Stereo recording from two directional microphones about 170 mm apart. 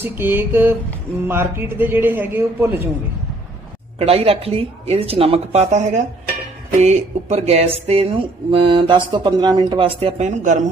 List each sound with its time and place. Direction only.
0.0 s a man's voice: 15° right (ahead or behind)
3.9 s speech: 35° right (ahead or behind)